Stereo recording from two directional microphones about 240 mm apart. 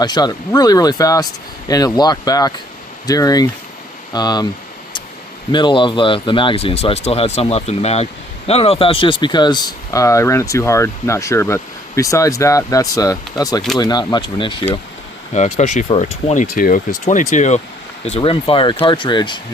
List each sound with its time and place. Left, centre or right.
0.0 s speech: centre
5.5 s speech: centre